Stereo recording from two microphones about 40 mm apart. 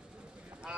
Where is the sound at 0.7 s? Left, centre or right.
Right.